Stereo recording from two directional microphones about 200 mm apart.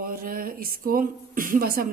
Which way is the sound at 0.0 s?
45° right (ahead or behind).